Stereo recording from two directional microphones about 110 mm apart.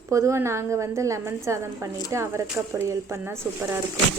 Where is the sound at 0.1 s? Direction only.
25° right (ahead or behind).